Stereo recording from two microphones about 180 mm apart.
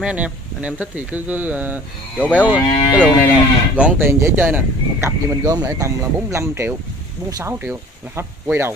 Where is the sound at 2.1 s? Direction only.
5° left (ahead or behind).